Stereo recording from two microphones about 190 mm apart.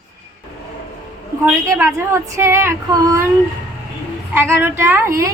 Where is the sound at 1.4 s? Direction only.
15° right (ahead or behind).